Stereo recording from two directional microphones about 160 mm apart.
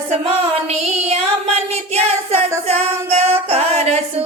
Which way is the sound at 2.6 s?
40° right (ahead or behind).